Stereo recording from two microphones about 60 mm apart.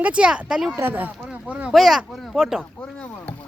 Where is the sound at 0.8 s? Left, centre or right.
Right.